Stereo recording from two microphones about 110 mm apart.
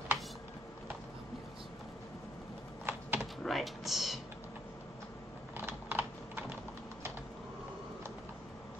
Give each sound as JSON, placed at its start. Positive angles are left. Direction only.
{"t": 2.9, "sound": "typing", "side_deg": -20}
{"t": 3.4, "sound": "typing", "side_deg": 0}
{"t": 5.7, "sound": "typing", "side_deg": -20}